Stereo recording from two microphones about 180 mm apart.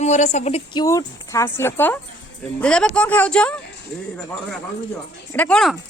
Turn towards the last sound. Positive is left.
turn(degrees=5)  # may be behind; listen again after turning